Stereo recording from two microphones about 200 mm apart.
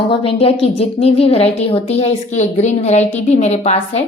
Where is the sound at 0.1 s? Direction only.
30° left (ahead or behind).